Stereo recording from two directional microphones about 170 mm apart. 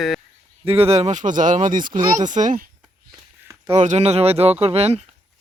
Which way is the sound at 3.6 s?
40° right (ahead or behind).